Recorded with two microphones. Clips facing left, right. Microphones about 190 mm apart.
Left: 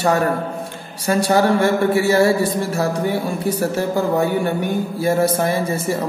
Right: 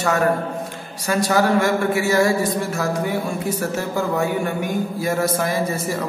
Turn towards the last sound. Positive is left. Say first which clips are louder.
# left 2 dB
turn(degrees=30)  # may be behind; listen again after turning